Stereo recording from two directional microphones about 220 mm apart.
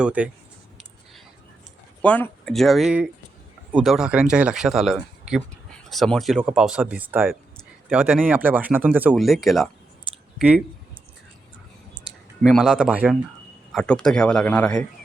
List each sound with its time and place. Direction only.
0.0 s speech: 5° right (ahead or behind)
2.0 s speech: 5° left (ahead or behind)
11.9 s speech: centre (ahead or behind)